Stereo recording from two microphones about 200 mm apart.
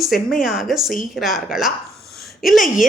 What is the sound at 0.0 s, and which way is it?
Speech, centre (ahead or behind).